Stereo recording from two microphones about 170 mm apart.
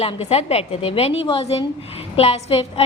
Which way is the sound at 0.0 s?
35° left (ahead or behind).